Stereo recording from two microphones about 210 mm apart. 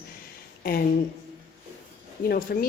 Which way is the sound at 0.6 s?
45° left (ahead or behind).